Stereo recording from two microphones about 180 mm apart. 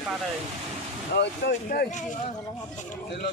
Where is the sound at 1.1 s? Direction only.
65° left (ahead or behind).